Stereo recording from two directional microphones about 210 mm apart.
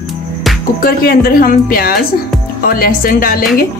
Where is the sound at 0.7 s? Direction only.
45° left (ahead or behind).